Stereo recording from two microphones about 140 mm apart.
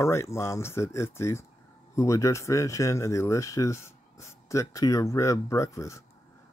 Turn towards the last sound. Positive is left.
turn(degrees=20)  # may be behind; listen again after turning